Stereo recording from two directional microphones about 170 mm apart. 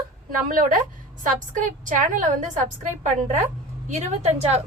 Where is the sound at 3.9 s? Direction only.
40° right (ahead or behind).